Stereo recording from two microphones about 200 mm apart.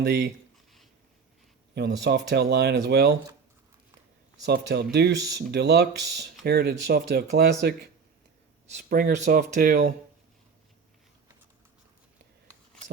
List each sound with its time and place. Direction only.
0.0 s speech: 55° right (ahead or behind)
1.7 s speech: 55° right (ahead or behind)
4.4 s speech: 55° right (ahead or behind)